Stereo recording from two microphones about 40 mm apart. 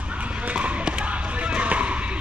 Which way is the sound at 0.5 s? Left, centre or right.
Right.